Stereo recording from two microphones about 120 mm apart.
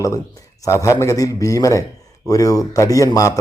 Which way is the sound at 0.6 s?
25° left (ahead or behind).